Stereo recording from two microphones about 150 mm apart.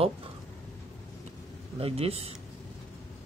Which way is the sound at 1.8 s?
40° right (ahead or behind).